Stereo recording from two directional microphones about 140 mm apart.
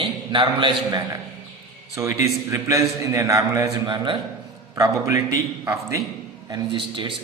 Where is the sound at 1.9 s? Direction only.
20° right (ahead or behind).